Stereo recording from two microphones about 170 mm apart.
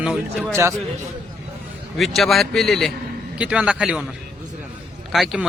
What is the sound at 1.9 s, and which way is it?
A man's voice, centre (ahead or behind).